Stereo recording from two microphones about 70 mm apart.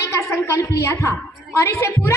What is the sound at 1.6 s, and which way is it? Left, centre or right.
Speech, left.